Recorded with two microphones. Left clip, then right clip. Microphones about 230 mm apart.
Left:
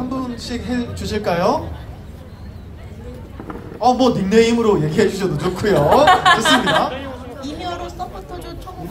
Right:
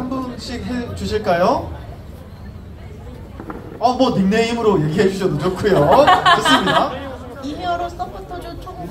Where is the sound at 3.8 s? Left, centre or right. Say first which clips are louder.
Left 1 dB; left.